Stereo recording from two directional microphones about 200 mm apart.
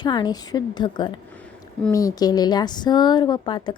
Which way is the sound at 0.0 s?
20° left (ahead or behind).